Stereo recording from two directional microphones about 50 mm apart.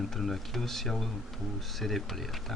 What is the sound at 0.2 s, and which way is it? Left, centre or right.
Speech, centre.